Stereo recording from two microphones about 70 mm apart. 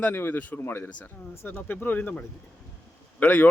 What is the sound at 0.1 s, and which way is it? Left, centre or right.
Speech, left.